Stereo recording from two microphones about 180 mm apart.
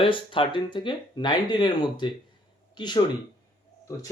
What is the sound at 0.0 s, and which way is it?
Speech, 30° left (ahead or behind).